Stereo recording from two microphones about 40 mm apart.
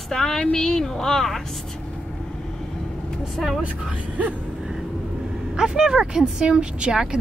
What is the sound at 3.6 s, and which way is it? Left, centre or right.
Speech, right.